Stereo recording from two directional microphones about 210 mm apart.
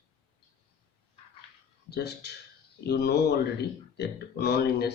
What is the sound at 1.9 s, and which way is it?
Speech, 50° left (ahead or behind).